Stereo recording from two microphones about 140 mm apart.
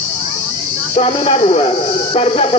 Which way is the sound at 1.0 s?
45° left (ahead or behind).